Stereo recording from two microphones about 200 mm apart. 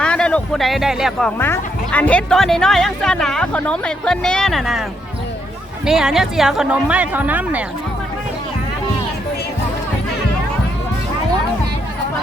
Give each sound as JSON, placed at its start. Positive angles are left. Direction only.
{"t": 0.0, "sound": "speech", "side_deg": 5}